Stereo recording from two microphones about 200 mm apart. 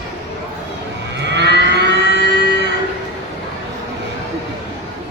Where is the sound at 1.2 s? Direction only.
60° right (ahead or behind).